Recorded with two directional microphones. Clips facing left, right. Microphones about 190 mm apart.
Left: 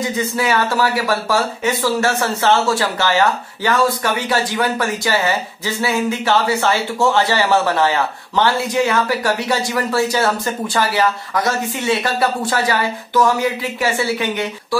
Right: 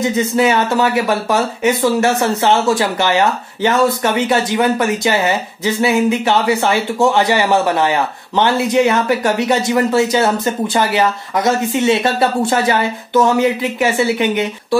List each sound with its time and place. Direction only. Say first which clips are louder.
0.4 s speech: right 3 dB; 20° right (ahead or behind)